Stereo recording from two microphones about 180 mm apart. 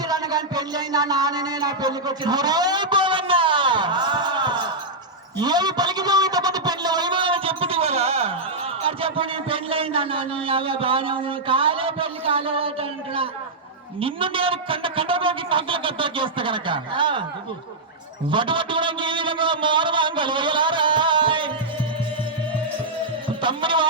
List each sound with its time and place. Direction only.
0.1 s a sound: 20° right (ahead or behind)
14.0 s a man's voice: 30° right (ahead or behind)
18.3 s a man's voice: 25° right (ahead or behind)
23.4 s music: 25° right (ahead or behind)